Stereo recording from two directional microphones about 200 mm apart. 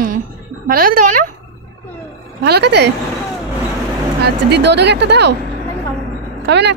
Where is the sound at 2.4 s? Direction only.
55° right (ahead or behind).